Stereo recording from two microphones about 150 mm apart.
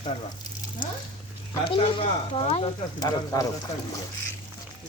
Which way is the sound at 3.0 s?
25° left (ahead or behind).